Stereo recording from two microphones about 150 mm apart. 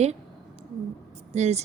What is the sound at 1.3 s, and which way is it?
Speech, 45° right (ahead or behind).